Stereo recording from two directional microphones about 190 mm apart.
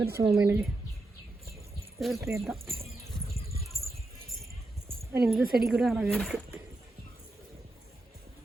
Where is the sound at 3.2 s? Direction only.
55° right (ahead or behind).